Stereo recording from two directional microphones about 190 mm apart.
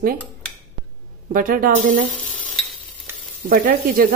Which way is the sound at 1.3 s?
45° right (ahead or behind).